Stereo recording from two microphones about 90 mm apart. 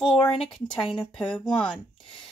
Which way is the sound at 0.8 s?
5° left (ahead or behind).